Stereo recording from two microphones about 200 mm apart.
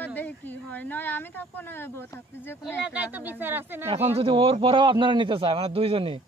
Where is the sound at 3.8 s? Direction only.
30° right (ahead or behind).